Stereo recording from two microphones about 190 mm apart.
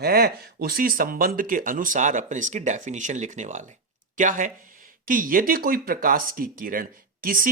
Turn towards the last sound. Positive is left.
turn(degrees=-45)  # may be behind; listen again after turning